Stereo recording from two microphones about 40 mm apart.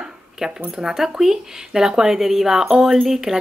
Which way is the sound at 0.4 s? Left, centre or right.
Centre.